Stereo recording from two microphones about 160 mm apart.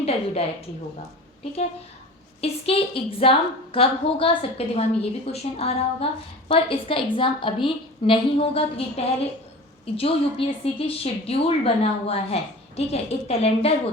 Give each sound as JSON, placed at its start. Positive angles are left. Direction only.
{"t": 0.0, "sound": "a woman's voice", "side_deg": 40}
{"t": 2.4, "sound": "a woman's voice", "side_deg": 40}